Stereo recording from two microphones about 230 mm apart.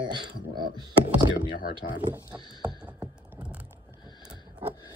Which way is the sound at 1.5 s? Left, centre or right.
Left.